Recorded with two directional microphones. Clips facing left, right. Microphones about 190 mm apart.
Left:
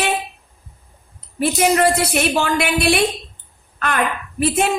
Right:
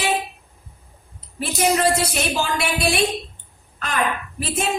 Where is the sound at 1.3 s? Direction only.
65° left (ahead or behind).